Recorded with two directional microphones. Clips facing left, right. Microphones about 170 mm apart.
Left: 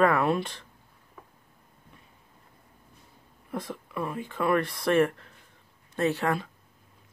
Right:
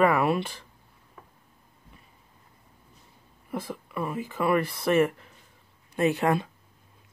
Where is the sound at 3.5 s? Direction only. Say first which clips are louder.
Right 1 dB; centre (ahead or behind).